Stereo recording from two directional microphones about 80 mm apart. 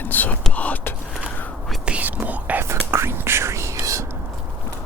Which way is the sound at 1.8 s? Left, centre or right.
Centre.